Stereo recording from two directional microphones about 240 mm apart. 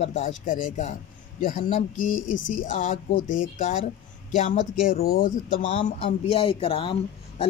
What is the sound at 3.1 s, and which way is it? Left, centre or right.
Speech, left.